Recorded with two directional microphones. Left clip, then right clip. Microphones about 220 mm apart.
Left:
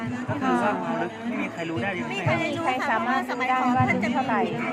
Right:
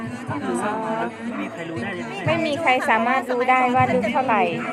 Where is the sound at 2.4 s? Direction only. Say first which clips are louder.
Right 6 dB; 50° right (ahead or behind).